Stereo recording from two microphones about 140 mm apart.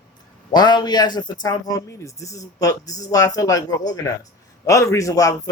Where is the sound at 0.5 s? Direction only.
30° left (ahead or behind).